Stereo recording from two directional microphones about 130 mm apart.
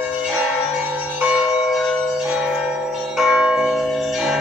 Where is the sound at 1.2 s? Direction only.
5° right (ahead or behind).